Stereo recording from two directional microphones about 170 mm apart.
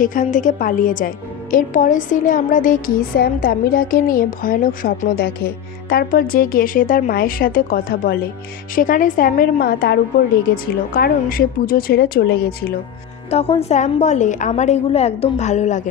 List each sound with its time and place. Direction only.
0.0 s a woman's voice: 50° left (ahead or behind); by 12.7 s 70° left (ahead or behind)
13.3 s a woman's voice: 35° left (ahead or behind)